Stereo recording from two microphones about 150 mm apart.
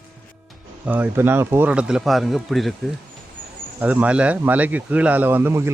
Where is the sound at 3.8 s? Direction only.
10° right (ahead or behind).